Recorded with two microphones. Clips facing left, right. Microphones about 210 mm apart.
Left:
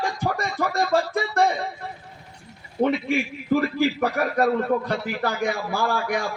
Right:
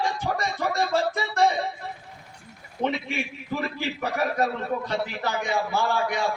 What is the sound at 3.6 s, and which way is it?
A man's voice, 55° left (ahead or behind).